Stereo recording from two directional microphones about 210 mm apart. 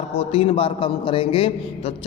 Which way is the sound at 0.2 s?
30° left (ahead or behind).